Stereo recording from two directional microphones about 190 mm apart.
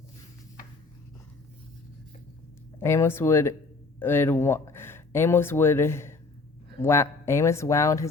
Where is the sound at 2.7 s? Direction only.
15° left (ahead or behind).